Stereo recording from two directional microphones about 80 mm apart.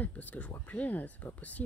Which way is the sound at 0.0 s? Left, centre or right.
Left.